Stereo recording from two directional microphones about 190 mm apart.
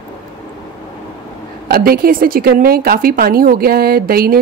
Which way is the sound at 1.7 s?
50° right (ahead or behind).